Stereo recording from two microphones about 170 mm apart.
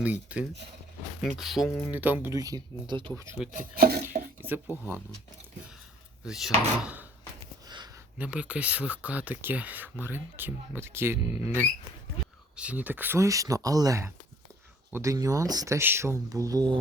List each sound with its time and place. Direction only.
0.0 s speech: 10° right (ahead or behind)
3.5 s speech: 65° right (ahead or behind)
4.7 s speech: 10° right (ahead or behind)
6.2 s speech: 5° right (ahead or behind)
8.2 s speech: 5° right (ahead or behind)
12.5 s speech: 10° right (ahead or behind)